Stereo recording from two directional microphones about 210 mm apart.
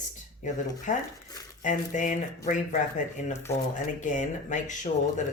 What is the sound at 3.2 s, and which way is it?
Speech, 35° left (ahead or behind).